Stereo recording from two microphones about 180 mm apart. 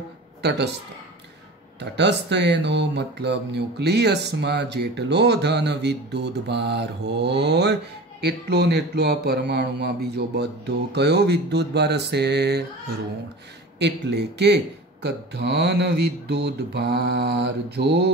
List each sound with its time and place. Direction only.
0.4 s speech: 70° right (ahead or behind)
1.8 s speech: 75° right (ahead or behind)